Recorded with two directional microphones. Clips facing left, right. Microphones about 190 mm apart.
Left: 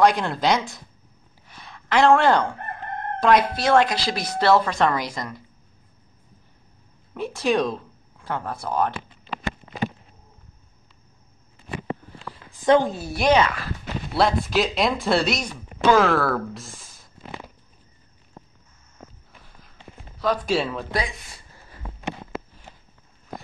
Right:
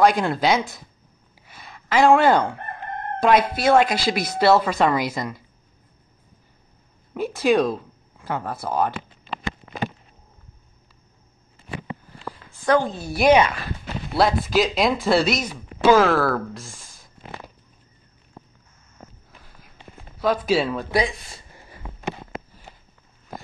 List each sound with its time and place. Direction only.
0.0 s speech: centre (ahead or behind)
1.5 s a sound: 5° right (ahead or behind)
3.2 s speech: 10° right (ahead or behind)
7.2 s speech: centre (ahead or behind)
12.4 s a sound: 15° left (ahead or behind)
12.9 s speech: 5° left (ahead or behind)
13.2 s speech: 10° right (ahead or behind)
20.2 s speech: 5° right (ahead or behind)